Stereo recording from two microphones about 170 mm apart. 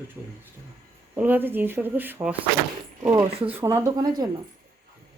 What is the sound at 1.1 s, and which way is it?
A woman's voice, 10° right (ahead or behind).